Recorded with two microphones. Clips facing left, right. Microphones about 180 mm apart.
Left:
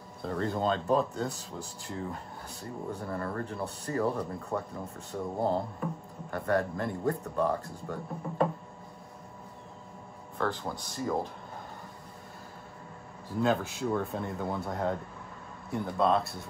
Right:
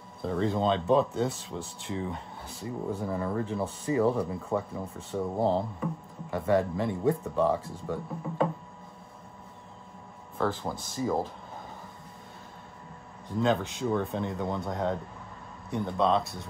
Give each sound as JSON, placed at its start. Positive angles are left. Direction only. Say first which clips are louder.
{"t": 0.2, "sound": "speech", "louder": "right 3 dB", "side_deg": 0}
{"t": 10.3, "sound": "speech", "louder": "right 2 dB", "side_deg": 0}
{"t": 13.4, "sound": "speech", "louder": "right 1 dB", "side_deg": 5}